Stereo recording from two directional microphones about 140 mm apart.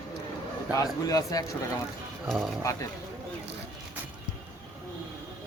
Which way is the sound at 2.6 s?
25° left (ahead or behind).